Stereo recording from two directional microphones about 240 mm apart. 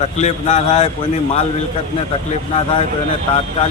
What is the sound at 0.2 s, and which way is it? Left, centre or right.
Speech, left.